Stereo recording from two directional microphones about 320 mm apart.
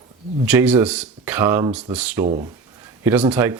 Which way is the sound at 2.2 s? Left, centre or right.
Right.